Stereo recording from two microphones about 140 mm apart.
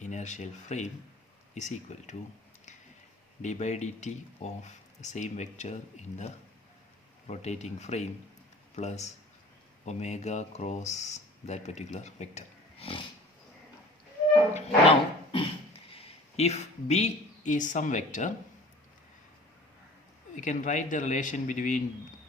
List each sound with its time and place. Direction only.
0.0 s speech: 60° left (ahead or behind)
3.4 s speech: 55° left (ahead or behind)
14.5 s dog: 40° left (ahead or behind)
15.9 s a woman's voice: 45° left (ahead or behind); by 18.3 s 60° left (ahead or behind)
20.3 s speech: 60° left (ahead or behind)